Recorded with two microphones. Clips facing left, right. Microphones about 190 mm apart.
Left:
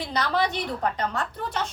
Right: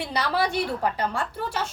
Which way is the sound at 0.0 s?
10° right (ahead or behind).